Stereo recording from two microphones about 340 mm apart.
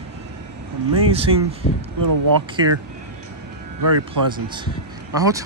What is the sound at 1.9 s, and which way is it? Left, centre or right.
Speech, right.